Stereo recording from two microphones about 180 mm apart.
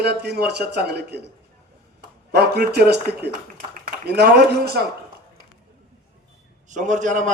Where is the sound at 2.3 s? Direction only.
65° right (ahead or behind).